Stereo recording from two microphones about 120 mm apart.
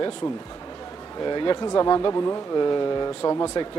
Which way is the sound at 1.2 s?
40° left (ahead or behind).